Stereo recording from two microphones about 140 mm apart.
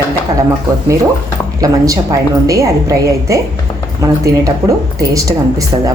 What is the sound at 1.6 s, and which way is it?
A woman's voice, 25° right (ahead or behind).